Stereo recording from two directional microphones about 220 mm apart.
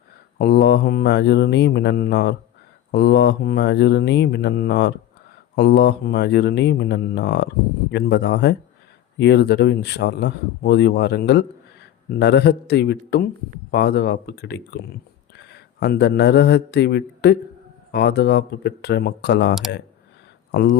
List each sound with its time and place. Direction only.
0.3 s speech: 45° left (ahead or behind)